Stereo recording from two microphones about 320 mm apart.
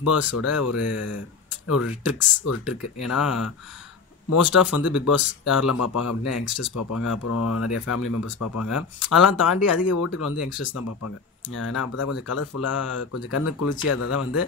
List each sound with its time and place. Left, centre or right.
0.0 s speech: left
2.6 s speech: centre
4.3 s speech: left